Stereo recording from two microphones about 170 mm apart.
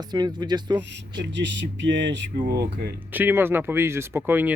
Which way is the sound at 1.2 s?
90° right.